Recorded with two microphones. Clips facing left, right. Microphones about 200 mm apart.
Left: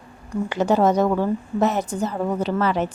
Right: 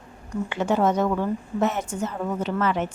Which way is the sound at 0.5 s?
40° left (ahead or behind).